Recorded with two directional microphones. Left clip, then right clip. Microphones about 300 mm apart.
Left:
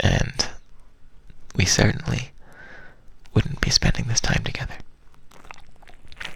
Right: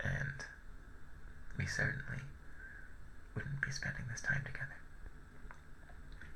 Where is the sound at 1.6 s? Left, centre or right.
Left.